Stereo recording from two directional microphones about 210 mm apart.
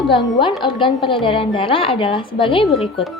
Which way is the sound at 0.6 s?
25° left (ahead or behind).